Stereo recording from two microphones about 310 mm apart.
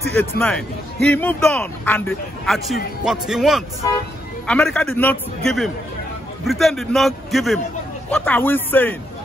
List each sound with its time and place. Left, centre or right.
0.2 s a man's voice: centre